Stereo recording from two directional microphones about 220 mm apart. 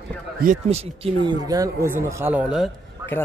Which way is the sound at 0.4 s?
35° right (ahead or behind).